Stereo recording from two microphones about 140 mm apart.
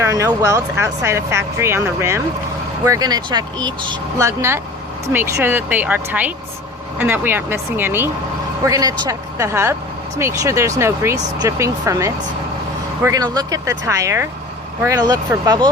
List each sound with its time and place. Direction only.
0.0 s a woman's voice: 20° right (ahead or behind)